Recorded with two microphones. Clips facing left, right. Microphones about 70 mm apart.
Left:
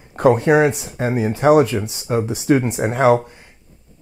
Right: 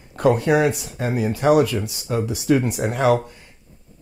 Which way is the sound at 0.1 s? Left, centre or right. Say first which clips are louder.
Left 4 dB; left.